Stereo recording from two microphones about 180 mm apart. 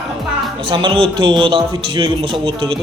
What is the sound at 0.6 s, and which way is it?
A man's voice, 25° right (ahead or behind).